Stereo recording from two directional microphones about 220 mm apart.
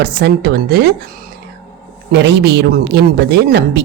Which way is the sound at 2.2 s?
50° right (ahead or behind).